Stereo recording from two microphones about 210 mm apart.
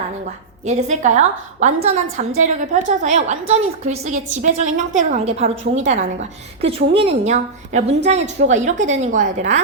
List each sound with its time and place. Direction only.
0.6 s a woman's voice: 35° right (ahead or behind)